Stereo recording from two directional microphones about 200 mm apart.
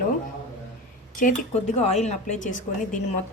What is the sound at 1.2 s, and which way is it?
A woman's voice, 35° left (ahead or behind).